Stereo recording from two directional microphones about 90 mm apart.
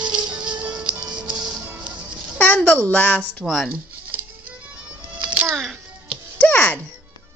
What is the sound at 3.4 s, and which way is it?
Speech, 5° left (ahead or behind).